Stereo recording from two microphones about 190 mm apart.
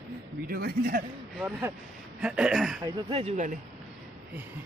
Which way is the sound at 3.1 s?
30° right (ahead or behind).